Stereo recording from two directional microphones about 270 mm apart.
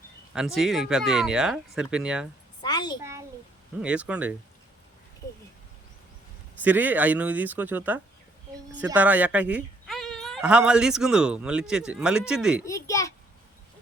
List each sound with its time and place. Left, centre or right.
0.3 s speech: centre
2.6 s a sound: centre
3.0 s a sound: centre
3.8 s speech: centre
6.6 s speech: centre
12.6 s a child's voice: centre